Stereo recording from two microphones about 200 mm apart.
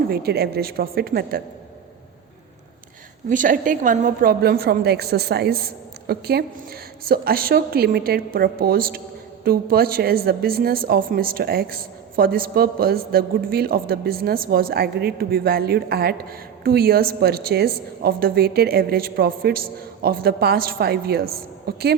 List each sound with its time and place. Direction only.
0.1 s speech: 50° right (ahead or behind)
3.2 s speech: 40° right (ahead or behind)